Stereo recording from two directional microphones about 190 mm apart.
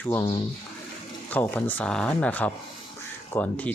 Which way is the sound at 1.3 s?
10° left (ahead or behind).